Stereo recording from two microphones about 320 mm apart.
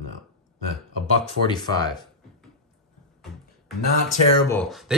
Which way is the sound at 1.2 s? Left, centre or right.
Centre.